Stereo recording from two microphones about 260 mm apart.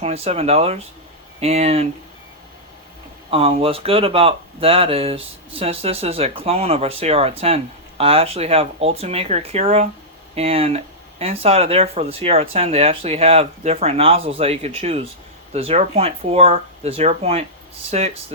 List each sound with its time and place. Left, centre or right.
0.0 s speech: right
3.2 s speech: right